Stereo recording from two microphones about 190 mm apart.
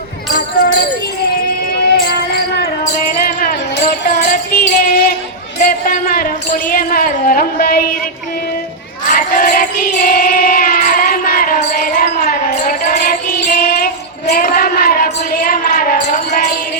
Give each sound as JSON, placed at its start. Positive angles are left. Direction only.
{"t": 0.3, "sound": "basketball bounce", "side_deg": 45}
{"t": 3.2, "sound": "music", "side_deg": 45}
{"t": 5.5, "sound": "a sound", "side_deg": 45}
{"t": 6.7, "sound": "speech", "side_deg": 50}
{"t": 9.0, "sound": "crowd", "side_deg": 45}